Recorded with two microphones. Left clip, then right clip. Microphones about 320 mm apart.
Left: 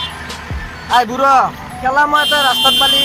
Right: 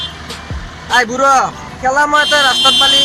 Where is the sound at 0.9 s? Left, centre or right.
Centre.